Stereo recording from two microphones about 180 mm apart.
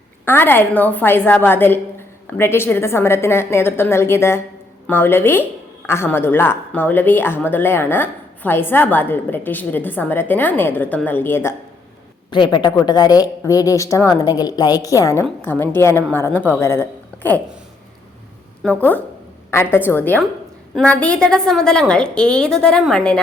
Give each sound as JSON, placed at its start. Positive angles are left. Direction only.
{"t": 0.3, "sound": "a woman's voice", "side_deg": 10}
{"t": 12.3, "sound": "a woman's voice", "side_deg": 25}
{"t": 18.8, "sound": "a woman's voice", "side_deg": 10}